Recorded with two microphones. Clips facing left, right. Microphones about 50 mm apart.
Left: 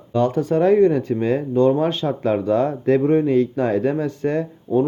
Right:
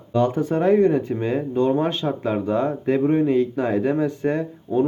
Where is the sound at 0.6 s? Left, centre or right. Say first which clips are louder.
Left 2 dB; left.